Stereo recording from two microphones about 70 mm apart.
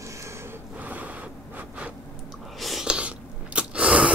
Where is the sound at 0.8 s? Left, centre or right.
Right.